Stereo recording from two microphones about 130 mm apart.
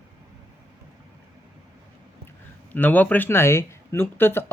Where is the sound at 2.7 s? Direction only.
10° left (ahead or behind).